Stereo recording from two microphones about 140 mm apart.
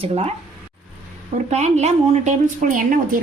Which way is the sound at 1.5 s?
55° right (ahead or behind).